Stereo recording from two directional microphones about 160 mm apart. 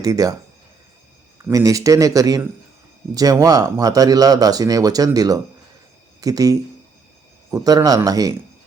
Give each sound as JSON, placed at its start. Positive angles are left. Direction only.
{"t": 0.0, "sound": "speech", "side_deg": -20}
{"t": 1.5, "sound": "speech", "side_deg": -20}